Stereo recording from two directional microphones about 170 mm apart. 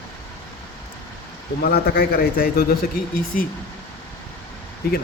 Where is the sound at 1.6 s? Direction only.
65° left (ahead or behind).